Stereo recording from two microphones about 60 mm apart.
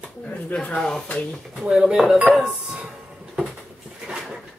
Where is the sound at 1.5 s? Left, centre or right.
Centre.